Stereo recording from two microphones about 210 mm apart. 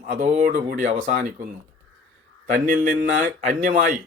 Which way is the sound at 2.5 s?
40° right (ahead or behind).